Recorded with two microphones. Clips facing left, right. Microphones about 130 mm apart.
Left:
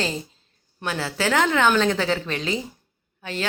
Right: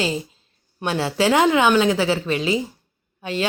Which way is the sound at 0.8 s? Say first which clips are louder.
Right 5 dB; 25° right (ahead or behind).